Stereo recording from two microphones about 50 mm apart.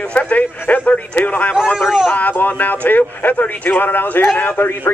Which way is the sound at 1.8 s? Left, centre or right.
Centre.